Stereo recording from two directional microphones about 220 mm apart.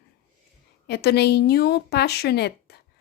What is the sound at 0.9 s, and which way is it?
A woman's voice, 50° left (ahead or behind).